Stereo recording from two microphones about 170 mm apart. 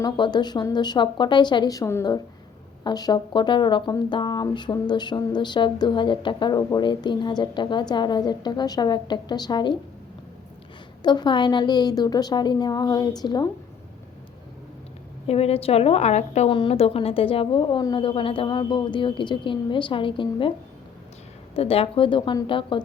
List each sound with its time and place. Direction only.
0.0 s speech: 25° left (ahead or behind)
11.0 s speech: 25° left (ahead or behind)
15.3 s a woman's voice: 35° left (ahead or behind)
21.5 s a woman's voice: 35° left (ahead or behind)